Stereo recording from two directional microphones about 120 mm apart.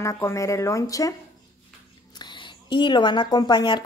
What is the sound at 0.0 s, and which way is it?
Speech, 25° left (ahead or behind).